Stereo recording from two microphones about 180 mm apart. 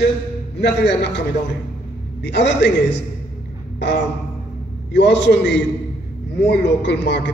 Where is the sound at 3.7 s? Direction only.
75° left (ahead or behind).